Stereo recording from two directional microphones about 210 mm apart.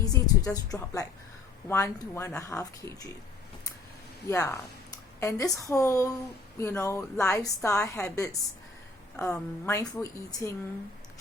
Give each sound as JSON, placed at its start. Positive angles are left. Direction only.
{"t": 0.0, "sound": "speech", "side_deg": 15}
{"t": 4.3, "sound": "speech", "side_deg": 15}